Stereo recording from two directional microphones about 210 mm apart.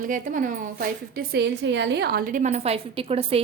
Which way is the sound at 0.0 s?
40° right (ahead or behind).